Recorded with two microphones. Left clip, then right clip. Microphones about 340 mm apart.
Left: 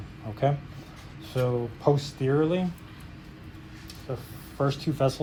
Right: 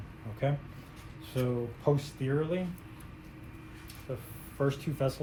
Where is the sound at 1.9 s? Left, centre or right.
Centre.